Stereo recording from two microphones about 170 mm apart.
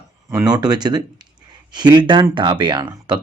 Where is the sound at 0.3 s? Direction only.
20° right (ahead or behind).